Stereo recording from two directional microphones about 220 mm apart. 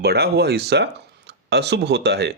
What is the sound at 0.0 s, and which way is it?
Speech, 45° right (ahead or behind).